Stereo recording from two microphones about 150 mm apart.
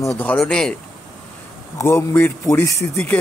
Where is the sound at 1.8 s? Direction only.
15° left (ahead or behind).